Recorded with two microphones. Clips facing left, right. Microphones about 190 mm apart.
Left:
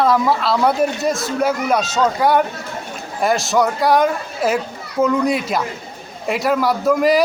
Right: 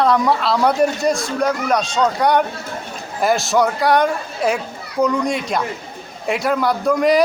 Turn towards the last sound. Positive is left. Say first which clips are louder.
# left 1 dB
turn(degrees=0)  # may be behind; listen again after turning